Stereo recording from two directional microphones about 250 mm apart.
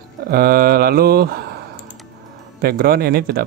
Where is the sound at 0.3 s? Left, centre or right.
Right.